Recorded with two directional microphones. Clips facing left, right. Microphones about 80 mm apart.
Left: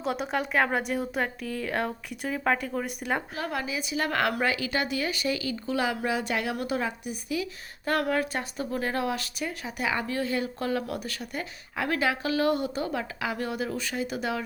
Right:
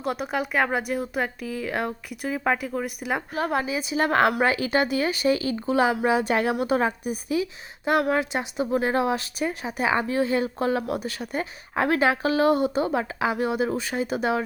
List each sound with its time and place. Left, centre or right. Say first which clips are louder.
0.0 s speech: right 2 dB; centre
3.5 s a woman's voice: right 4 dB; right
7.9 s a woman's voice: right 4 dB; centre; by 14.4 s right